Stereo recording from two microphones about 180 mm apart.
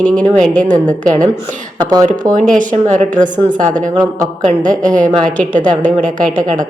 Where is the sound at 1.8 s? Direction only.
20° right (ahead or behind).